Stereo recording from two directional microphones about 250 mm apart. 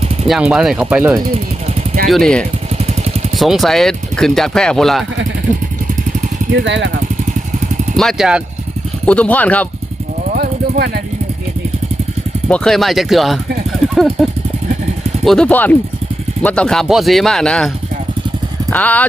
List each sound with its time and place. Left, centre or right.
0.3 s speech: centre
2.7 s vehicle: right
3.3 s speech: centre
7.9 s speech: centre
10.3 s vehicle: right
12.5 s speech: centre
18.7 s speech: centre